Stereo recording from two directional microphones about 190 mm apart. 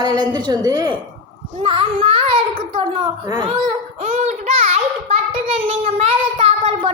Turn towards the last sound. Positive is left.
turn(degrees=-30)  # may be behind; listen again after turning